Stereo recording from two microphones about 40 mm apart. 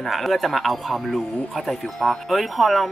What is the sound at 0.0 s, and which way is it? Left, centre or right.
Speech, centre.